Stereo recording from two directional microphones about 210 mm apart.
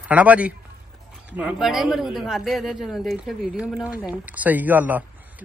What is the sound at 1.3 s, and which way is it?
A man's voice, 5° right (ahead or behind).